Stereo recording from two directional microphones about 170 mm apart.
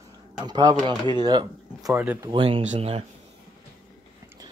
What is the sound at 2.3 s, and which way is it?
Speech, 30° right (ahead or behind).